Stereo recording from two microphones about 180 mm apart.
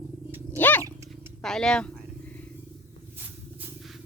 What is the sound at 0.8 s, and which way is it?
Roaring cats, 20° right (ahead or behind).